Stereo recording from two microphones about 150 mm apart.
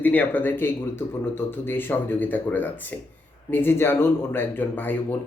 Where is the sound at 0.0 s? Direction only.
10° left (ahead or behind).